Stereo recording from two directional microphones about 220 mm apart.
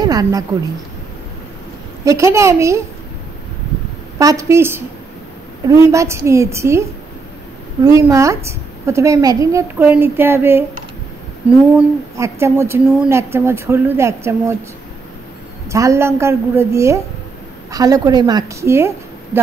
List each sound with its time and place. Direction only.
0.0 s a sound: 15° right (ahead or behind)
2.0 s a woman's voice: 15° right (ahead or behind)
4.2 s a woman's voice: 15° right (ahead or behind)
12.2 s a woman's voice: 10° right (ahead or behind)
15.7 s a woman's voice: 15° right (ahead or behind)